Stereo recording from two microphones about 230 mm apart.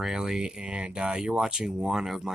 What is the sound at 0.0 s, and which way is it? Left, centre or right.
Speech, centre.